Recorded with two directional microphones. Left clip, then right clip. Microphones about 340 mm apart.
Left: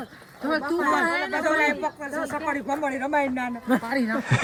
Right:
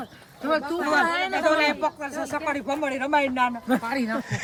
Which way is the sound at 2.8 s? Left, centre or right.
Centre.